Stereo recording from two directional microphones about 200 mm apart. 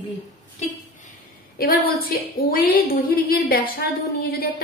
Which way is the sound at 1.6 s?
45° left (ahead or behind).